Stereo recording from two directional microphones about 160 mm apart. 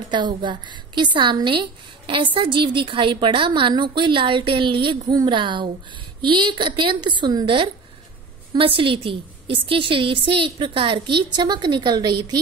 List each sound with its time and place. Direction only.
0.1 s a woman's voice: 30° right (ahead or behind)